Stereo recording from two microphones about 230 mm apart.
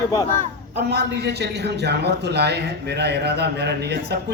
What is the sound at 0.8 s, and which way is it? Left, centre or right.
A man's voice, right.